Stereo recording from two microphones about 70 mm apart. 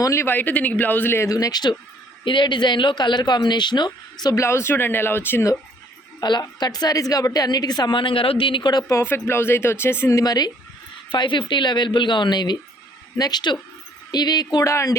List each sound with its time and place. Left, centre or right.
0.0 s speech: left
0.3 s a woman's voice: left
1.3 s speech: left
2.3 s speech: left
4.4 s speech: left
6.1 s a woman's voice: left
8.7 s speech: left
9.0 s speech: left
10.2 s a woman's voice: left
11.2 s speech: left
13.1 s speech: left
14.1 s speech: left
14.6 s speech: left